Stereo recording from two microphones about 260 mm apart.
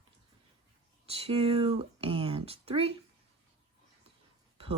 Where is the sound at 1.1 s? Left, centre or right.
Right.